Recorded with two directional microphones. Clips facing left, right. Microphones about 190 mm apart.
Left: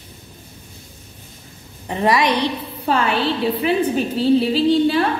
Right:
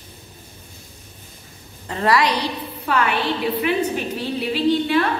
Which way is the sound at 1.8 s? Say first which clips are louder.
Left 1 dB; 15° left (ahead or behind).